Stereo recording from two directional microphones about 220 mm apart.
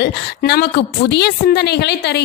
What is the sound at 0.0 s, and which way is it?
A woman's voice, 50° left (ahead or behind).